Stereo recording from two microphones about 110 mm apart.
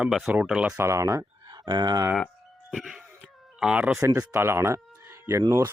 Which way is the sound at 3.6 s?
10° right (ahead or behind).